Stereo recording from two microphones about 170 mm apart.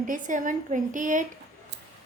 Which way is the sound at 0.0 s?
50° right (ahead or behind).